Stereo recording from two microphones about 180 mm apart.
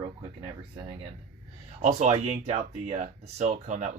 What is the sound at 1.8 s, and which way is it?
Speech, 40° right (ahead or behind).